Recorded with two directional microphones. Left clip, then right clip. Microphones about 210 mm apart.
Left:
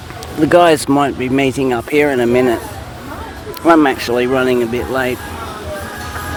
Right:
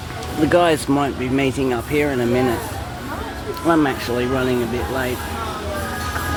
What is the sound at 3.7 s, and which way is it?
Speech, 55° left (ahead or behind).